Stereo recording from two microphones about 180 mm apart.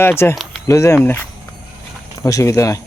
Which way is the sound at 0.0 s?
15° left (ahead or behind).